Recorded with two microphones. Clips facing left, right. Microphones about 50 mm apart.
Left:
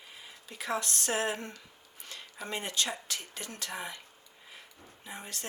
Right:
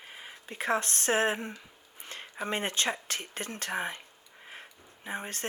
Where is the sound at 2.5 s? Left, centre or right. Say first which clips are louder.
Right 3 dB; right.